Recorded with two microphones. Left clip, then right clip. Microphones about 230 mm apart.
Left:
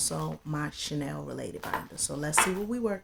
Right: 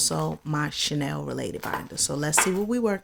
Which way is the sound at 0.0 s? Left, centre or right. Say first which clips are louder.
Right 7 dB; right.